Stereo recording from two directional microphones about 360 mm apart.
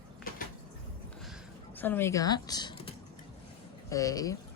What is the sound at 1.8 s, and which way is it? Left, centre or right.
Speech, centre.